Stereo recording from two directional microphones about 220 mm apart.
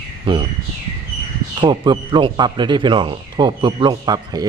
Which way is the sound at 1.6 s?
20° right (ahead or behind).